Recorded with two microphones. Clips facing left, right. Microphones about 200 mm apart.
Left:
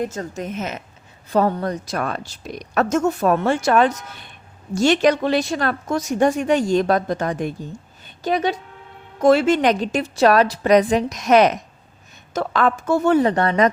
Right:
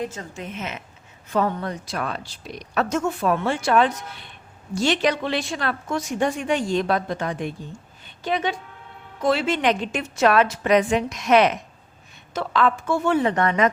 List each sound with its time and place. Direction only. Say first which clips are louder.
0.0 s a woman's voice: left 5 dB; 45° left (ahead or behind)